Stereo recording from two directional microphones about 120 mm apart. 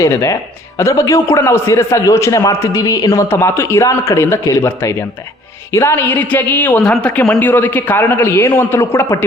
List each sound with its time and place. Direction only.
0.0 s a man's voice: 25° left (ahead or behind)